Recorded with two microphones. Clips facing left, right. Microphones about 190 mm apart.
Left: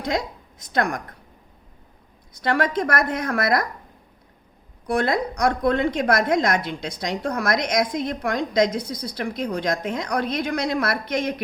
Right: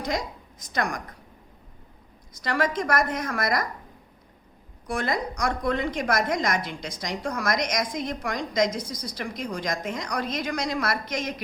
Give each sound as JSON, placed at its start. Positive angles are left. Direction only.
{"t": 0.6, "sound": "a woman's voice", "side_deg": 60}
{"t": 2.3, "sound": "a woman's voice", "side_deg": 60}
{"t": 4.9, "sound": "a woman's voice", "side_deg": 60}